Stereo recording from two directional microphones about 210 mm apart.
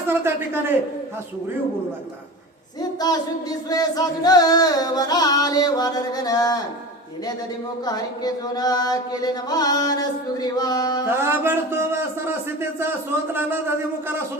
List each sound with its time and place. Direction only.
0.1 s a man's voice: 10° right (ahead or behind)
3.0 s music: 20° left (ahead or behind)
7.9 s chant: 20° left (ahead or behind)
11.1 s a man's voice: 10° right (ahead or behind)